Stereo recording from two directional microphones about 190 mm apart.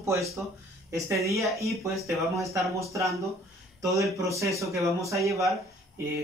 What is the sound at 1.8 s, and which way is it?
Speech, 15° right (ahead or behind).